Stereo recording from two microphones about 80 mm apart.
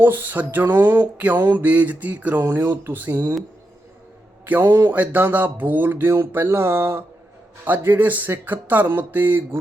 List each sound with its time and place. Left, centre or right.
0.0 s speech: right
2.4 s speech: right
4.4 s speech: right